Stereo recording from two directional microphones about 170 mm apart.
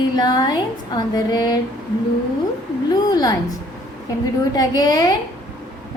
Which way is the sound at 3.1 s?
20° left (ahead or behind).